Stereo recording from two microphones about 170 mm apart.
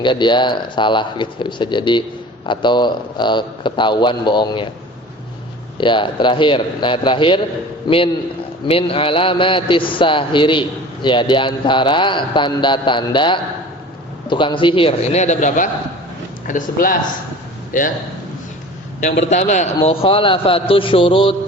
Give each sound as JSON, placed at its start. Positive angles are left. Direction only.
{"t": 0.0, "sound": "a man's voice", "side_deg": 25}
{"t": 5.7, "sound": "a man's voice", "side_deg": 30}
{"t": 19.3, "sound": "a man's voice", "side_deg": 45}